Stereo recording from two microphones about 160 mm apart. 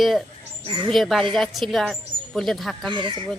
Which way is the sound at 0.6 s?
30° right (ahead or behind).